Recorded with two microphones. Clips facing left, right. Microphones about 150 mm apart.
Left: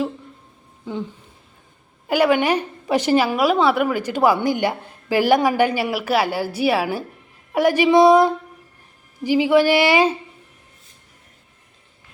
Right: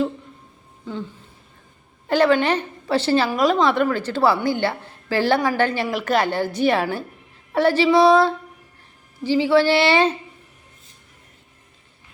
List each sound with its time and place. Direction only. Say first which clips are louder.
2.0 s a woman's voice: even; 10° left (ahead or behind)